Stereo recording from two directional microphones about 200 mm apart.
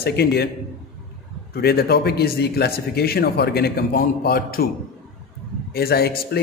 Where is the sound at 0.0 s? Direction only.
55° left (ahead or behind).